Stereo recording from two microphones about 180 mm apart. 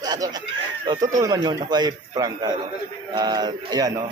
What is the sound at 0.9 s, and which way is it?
A man's voice, 20° right (ahead or behind).